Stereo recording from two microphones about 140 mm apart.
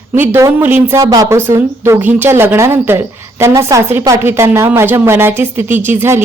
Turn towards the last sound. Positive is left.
turn(degrees=-15)  # may be behind; listen again after turning